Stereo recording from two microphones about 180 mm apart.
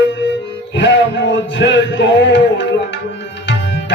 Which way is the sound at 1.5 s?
80° left.